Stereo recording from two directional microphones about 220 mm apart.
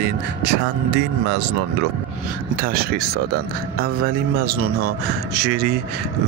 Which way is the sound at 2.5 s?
45° right (ahead or behind).